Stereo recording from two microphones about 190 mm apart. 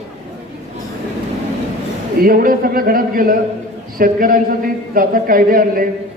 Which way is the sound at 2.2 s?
50° right (ahead or behind).